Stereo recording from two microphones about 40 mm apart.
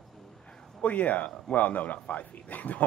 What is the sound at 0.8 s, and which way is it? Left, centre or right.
Speech, left.